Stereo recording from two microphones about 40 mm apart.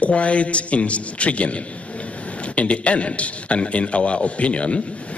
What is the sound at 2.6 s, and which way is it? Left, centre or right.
A man's voice, left.